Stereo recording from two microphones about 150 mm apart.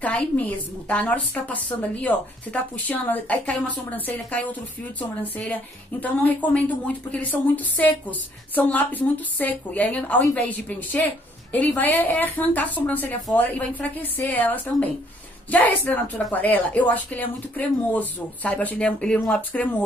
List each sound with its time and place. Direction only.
0.0 s a woman's voice: 10° left (ahead or behind)